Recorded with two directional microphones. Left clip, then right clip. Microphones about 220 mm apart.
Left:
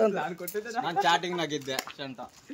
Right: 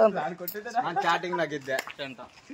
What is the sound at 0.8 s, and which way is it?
Speech, 40° left (ahead or behind).